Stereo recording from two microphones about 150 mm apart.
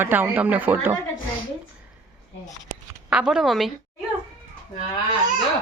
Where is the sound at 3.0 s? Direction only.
5° right (ahead or behind).